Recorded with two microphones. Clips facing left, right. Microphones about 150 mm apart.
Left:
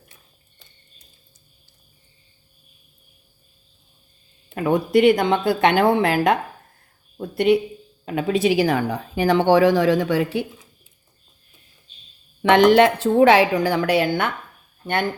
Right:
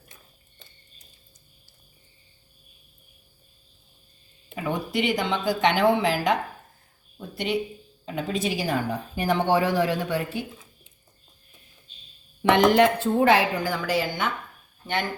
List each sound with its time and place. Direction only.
4.5 s speech: 55° left (ahead or behind); by 10.2 s 90° left
12.4 s speech: 85° left; by 14.3 s 65° left (ahead or behind)